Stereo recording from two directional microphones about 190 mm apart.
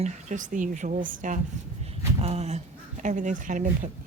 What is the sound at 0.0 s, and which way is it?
A woman's voice, 40° right (ahead or behind).